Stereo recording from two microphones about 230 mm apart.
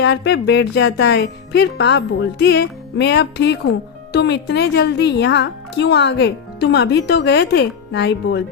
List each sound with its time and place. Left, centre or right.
0.0 s speech: left